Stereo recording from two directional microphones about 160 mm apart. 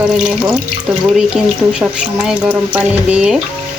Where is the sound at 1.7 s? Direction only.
5° right (ahead or behind).